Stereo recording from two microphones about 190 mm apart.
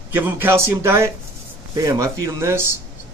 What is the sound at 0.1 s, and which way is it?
Speech, 10° right (ahead or behind).